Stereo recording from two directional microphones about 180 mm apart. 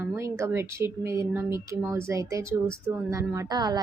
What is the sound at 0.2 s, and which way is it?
A woman's voice, 15° right (ahead or behind).